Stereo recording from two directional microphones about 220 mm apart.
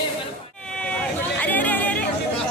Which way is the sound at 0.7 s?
5° left (ahead or behind).